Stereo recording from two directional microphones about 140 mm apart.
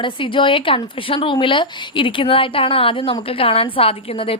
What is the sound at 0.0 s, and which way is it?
Speech, 35° left (ahead or behind).